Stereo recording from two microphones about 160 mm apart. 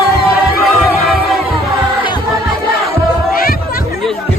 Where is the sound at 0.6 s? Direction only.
Centre (ahead or behind).